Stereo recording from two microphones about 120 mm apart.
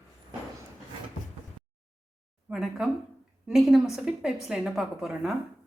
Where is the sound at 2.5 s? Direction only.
5° right (ahead or behind).